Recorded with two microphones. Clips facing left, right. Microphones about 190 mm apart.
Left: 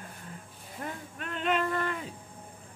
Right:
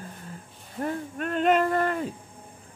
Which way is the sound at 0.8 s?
45° right (ahead or behind).